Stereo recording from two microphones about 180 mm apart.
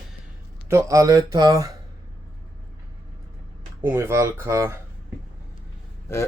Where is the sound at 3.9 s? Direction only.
15° right (ahead or behind).